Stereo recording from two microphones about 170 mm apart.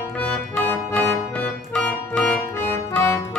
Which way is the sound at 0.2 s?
10° left (ahead or behind).